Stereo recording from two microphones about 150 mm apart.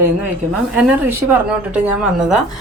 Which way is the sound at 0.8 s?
10° right (ahead or behind).